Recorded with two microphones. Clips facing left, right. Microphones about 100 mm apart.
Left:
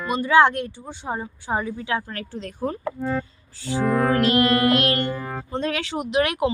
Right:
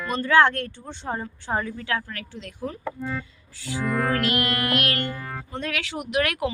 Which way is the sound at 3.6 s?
30° left (ahead or behind).